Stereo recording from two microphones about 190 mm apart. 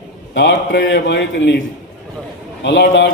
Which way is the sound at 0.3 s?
70° left (ahead or behind).